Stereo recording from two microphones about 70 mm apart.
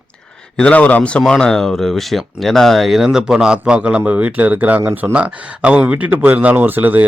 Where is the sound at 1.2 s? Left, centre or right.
Centre.